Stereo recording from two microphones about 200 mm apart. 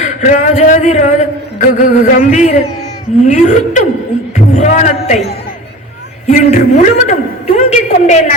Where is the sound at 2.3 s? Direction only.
35° left (ahead or behind).